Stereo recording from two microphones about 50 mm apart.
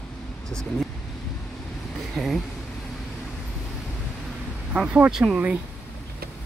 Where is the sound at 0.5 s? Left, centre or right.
Centre.